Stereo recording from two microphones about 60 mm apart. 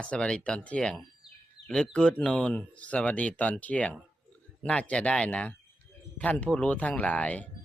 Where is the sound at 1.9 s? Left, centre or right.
Centre.